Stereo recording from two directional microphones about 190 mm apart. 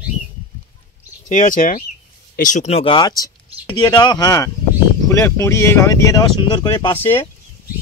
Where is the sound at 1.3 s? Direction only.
40° left (ahead or behind); by 7.2 s 10° left (ahead or behind).